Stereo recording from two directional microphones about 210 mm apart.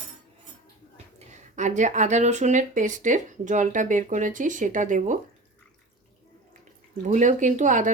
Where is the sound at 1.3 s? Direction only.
35° right (ahead or behind).